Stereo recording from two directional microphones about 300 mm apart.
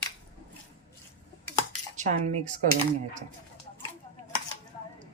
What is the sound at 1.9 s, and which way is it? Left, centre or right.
Speech, right.